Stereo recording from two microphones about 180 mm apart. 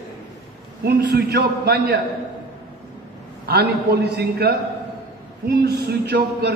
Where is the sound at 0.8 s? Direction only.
60° right (ahead or behind).